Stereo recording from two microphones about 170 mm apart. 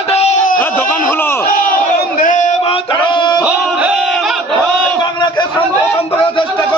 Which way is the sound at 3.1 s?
25° left (ahead or behind).